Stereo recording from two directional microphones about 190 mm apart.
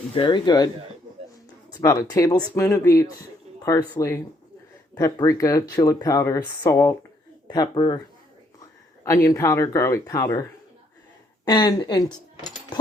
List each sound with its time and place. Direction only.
0.1 s speech: 25° left (ahead or behind)
9.0 s speech: 15° left (ahead or behind)
11.4 s speech: 25° left (ahead or behind)